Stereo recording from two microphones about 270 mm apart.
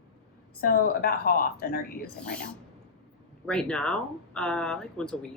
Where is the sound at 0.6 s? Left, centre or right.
Left.